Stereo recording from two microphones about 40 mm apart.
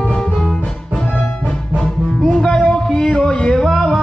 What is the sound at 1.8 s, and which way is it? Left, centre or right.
Music, centre.